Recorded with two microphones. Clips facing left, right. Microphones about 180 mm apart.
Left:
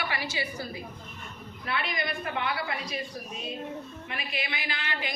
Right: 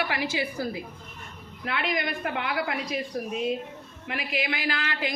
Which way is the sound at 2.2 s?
75° right (ahead or behind).